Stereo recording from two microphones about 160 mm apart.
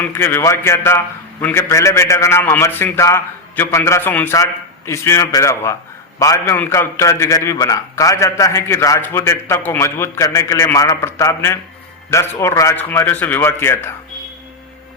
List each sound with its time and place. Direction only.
0.0 s a man's voice: 15° left (ahead or behind)